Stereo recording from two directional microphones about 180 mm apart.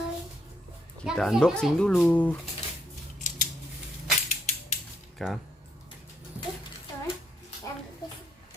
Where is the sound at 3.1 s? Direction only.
45° left (ahead or behind).